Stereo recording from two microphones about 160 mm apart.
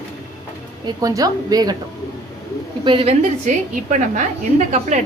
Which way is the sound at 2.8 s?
35° right (ahead or behind).